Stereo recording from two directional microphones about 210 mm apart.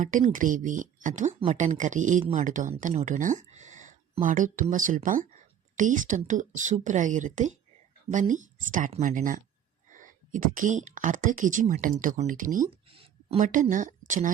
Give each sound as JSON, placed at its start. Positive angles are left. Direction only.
{"t": 0.0, "sound": "speech", "side_deg": -35}